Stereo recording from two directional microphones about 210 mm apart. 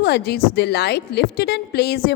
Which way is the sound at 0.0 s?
50° left (ahead or behind).